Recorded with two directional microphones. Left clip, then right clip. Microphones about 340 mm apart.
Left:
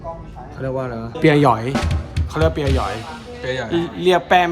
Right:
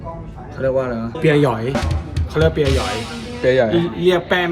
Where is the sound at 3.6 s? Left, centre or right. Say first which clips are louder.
Right 5 dB; centre.